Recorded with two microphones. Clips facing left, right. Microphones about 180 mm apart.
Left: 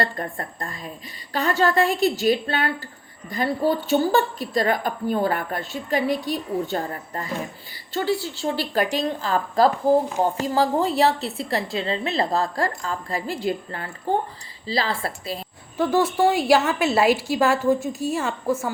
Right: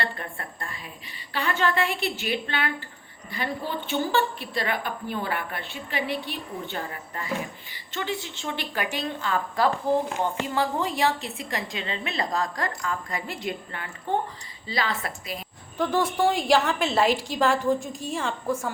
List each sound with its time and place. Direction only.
0.0 s a woman's voice: 40° left (ahead or behind)
15.8 s a woman's voice: 5° left (ahead or behind)